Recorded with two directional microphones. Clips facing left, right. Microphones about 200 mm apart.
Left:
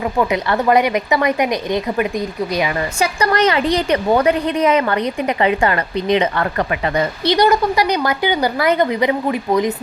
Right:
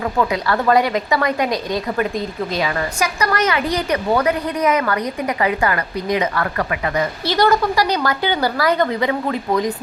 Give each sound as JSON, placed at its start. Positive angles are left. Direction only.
{"t": 0.2, "sound": "a woman's voice", "side_deg": 20}
{"t": 3.0, "sound": "a woman's voice", "side_deg": 30}
{"t": 7.3, "sound": "a woman's voice", "side_deg": 20}